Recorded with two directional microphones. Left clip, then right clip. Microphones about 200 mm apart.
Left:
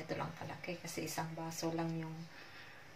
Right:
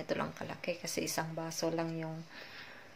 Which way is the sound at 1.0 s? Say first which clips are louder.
Right 5 dB; 35° right (ahead or behind).